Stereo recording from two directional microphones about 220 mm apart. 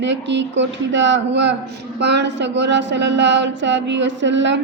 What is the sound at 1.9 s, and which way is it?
A woman's voice, 50° right (ahead or behind).